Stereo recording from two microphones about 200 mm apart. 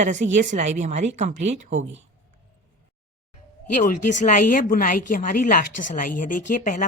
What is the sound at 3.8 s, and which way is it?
A woman's voice, 40° left (ahead or behind).